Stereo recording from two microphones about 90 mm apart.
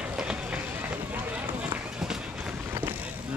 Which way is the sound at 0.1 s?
10° right (ahead or behind).